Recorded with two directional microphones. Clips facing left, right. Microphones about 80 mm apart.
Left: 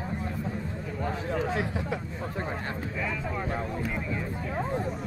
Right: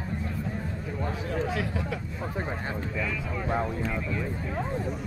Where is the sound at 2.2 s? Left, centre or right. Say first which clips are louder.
Right 1 dB; centre.